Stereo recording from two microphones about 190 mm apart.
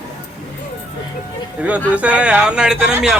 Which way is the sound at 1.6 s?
5° right (ahead or behind).